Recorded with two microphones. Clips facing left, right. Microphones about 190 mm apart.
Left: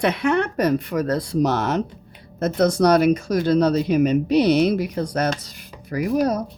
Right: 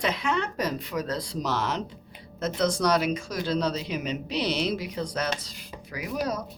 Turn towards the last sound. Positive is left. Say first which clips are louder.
# left 9 dB
turn(degrees=50)  # may be behind; listen again after turning